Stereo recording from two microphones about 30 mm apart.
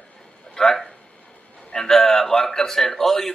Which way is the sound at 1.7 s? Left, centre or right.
Left.